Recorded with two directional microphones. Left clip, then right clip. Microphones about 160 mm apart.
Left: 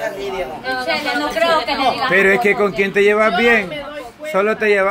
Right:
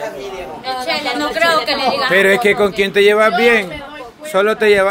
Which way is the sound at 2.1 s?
25° right (ahead or behind).